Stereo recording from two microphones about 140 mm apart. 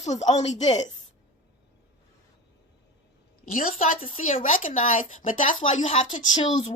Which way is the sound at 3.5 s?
75° left (ahead or behind).